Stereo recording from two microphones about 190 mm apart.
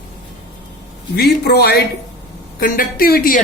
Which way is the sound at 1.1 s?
55° left (ahead or behind).